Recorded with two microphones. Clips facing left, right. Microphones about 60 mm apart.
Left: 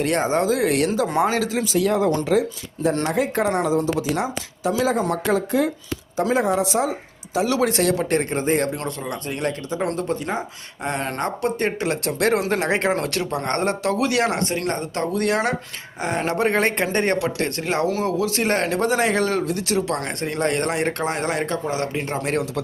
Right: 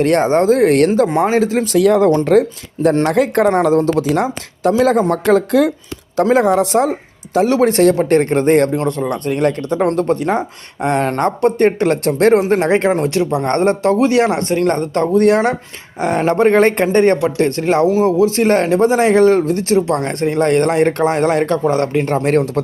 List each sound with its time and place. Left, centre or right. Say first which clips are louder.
0.0 s speech: right 8 dB; right
1.1 s speech: right 6 dB; right
1.6 s speech: right 8 dB; right
2.0 s speech: right 8 dB; right
7.3 s speech: right 8 dB; right
8.7 s speech: right 10 dB; right
9.6 s speech: right 9 dB; right
12.9 s speech: right 7 dB; right